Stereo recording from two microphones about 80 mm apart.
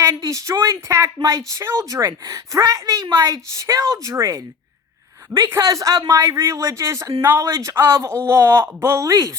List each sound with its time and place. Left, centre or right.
0.0 s a sound: right
0.6 s speech: right
5.5 s speech: right
9.0 s speech: right